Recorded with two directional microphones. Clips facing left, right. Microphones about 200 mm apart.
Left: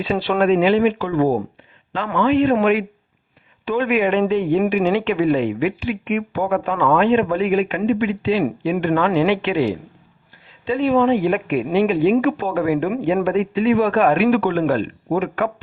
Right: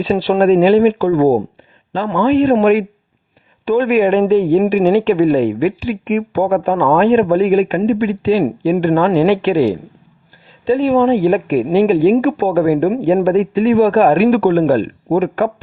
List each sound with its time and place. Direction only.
0.3 s speech: 35° right (ahead or behind)